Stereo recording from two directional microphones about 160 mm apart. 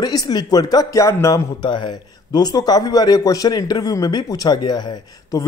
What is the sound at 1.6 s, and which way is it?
A man's voice, 30° left (ahead or behind).